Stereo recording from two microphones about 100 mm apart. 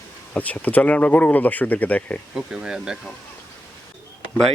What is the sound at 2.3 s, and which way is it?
Speech, 5° right (ahead or behind).